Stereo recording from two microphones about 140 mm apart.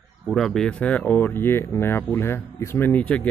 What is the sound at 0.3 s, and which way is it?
Speech, centre (ahead or behind).